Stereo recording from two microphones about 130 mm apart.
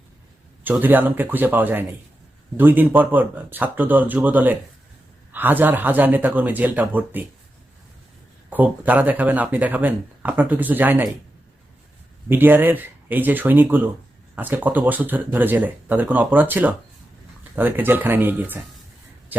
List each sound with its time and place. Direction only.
0.6 s speech: 15° right (ahead or behind)
8.4 s speech: 15° right (ahead or behind)
12.3 s speech: 15° right (ahead or behind)